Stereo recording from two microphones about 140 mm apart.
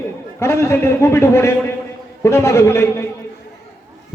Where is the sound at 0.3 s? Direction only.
20° left (ahead or behind).